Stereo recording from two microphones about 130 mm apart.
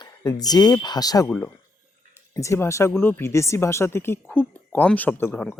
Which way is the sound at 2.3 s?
25° left (ahead or behind).